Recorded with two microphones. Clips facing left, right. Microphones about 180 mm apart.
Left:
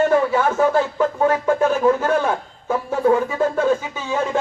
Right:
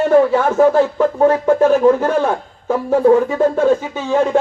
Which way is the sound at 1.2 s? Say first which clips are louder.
Right 6 dB; 35° right (ahead or behind).